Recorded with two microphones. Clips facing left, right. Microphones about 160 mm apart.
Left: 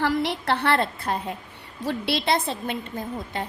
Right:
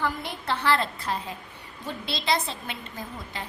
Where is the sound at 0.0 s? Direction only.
75° left (ahead or behind); by 1.4 s 55° left (ahead or behind).